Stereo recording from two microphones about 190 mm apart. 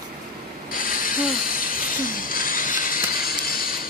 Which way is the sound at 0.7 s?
45° left (ahead or behind).